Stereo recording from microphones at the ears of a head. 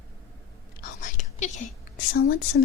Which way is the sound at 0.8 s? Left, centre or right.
Left.